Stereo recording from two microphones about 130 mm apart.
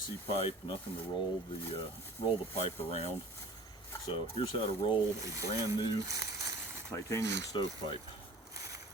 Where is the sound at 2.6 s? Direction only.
50° left (ahead or behind).